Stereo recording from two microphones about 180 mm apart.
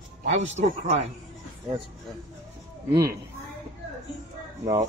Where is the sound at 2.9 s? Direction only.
15° right (ahead or behind).